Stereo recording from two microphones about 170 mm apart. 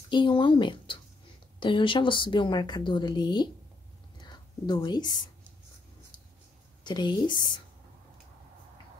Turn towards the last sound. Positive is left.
turn(degrees=25)  # may be behind; listen again after turning